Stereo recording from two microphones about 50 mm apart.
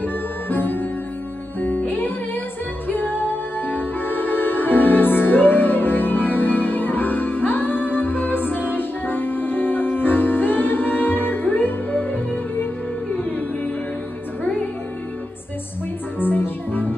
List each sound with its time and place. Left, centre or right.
0.0 s music: left
14.4 s music: left
16.2 s music: left